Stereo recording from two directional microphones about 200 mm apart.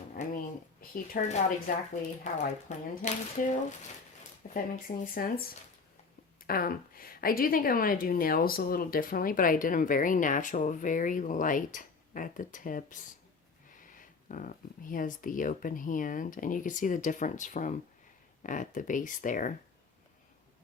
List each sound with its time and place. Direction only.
0.8 s a woman's voice: 45° left (ahead or behind)
6.5 s a woman's voice: 45° left (ahead or behind)